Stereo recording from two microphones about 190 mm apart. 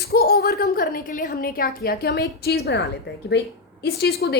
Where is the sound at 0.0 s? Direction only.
55° left (ahead or behind).